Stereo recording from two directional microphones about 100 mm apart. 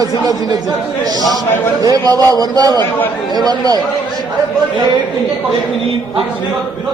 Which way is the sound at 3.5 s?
40° right (ahead or behind).